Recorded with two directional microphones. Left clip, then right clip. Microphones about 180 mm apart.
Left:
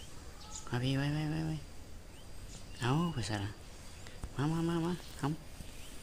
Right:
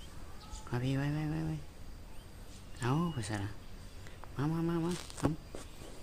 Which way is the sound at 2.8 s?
Centre (ahead or behind).